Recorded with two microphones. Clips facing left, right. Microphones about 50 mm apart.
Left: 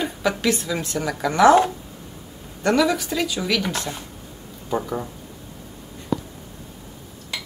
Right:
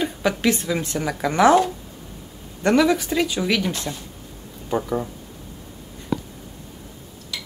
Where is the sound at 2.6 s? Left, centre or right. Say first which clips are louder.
Right 2 dB; centre.